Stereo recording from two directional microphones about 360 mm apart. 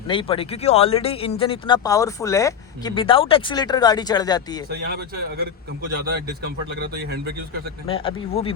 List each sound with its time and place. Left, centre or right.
0.1 s speech: centre
6.7 s a man's voice: right
7.9 s speech: centre